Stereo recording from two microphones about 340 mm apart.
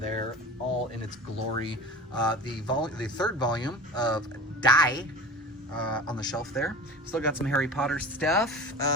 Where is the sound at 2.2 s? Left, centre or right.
Centre.